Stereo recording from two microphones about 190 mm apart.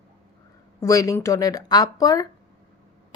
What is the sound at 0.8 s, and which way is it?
Speech, 15° left (ahead or behind).